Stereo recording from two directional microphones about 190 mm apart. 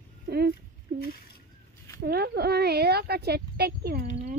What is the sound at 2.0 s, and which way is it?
Speech, 60° right (ahead or behind).